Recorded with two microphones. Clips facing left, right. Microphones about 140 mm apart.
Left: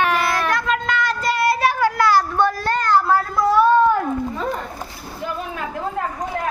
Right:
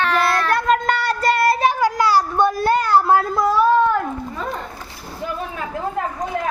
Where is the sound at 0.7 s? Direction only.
45° right (ahead or behind).